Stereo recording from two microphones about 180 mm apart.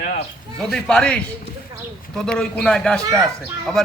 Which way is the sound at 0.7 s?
5° left (ahead or behind).